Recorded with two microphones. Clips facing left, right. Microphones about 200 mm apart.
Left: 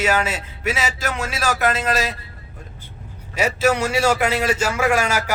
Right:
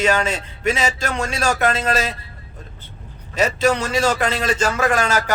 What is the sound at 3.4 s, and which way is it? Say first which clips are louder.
A man's voice: right 1 dB; 10° left (ahead or behind).